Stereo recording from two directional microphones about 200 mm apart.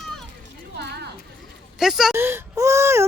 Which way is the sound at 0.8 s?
55° right (ahead or behind).